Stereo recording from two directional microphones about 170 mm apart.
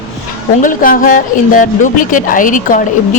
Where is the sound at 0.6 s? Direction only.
55° left (ahead or behind).